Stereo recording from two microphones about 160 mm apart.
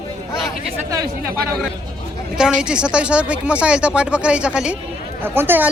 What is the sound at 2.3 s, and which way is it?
Speech, 5° right (ahead or behind).